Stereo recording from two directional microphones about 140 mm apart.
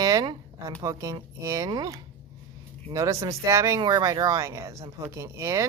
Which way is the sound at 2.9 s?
20° right (ahead or behind).